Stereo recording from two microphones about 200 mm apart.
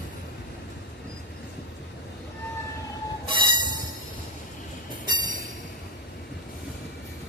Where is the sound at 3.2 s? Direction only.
25° right (ahead or behind).